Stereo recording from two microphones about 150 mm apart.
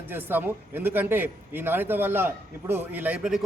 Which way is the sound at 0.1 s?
15° right (ahead or behind).